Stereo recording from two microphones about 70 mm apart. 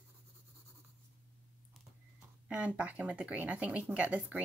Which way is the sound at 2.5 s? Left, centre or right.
Centre.